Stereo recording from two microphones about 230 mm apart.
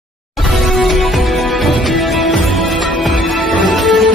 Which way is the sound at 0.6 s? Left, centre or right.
Centre.